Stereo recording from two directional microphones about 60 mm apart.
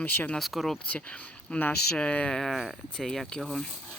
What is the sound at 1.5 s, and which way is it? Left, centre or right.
Speech, centre.